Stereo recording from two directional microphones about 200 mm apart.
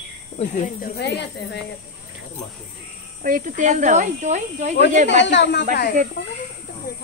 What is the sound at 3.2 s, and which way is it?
Speech, 40° right (ahead or behind).